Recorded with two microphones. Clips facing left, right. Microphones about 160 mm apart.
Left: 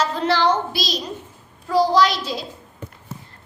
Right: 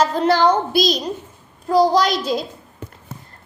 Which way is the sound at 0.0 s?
45° right (ahead or behind).